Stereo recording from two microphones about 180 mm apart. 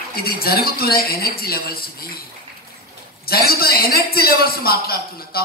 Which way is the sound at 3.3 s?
60° left (ahead or behind).